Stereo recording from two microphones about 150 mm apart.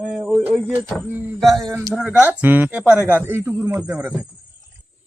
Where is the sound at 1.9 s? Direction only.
10° right (ahead or behind).